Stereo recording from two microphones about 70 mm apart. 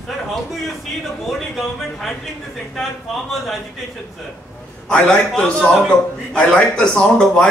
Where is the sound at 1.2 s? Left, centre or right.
Centre.